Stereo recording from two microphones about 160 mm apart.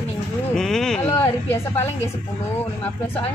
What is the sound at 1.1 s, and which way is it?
Speech, 15° left (ahead or behind).